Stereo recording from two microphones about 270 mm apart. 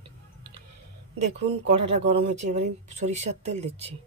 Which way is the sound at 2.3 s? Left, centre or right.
Right.